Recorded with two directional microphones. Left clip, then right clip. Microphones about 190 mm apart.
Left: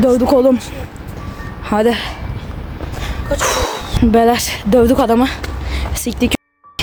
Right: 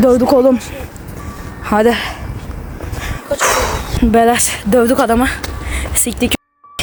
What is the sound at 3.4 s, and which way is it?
Dog, 10° right (ahead or behind).